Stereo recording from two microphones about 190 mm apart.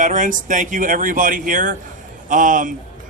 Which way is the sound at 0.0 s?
45° right (ahead or behind).